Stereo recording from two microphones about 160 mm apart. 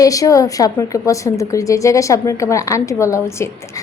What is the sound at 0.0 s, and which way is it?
A woman's voice, 20° left (ahead or behind).